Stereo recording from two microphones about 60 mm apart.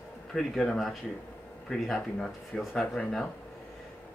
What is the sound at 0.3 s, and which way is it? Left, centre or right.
Speech, centre.